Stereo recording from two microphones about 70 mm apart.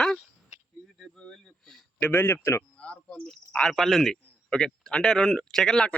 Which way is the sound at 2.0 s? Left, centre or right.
Left.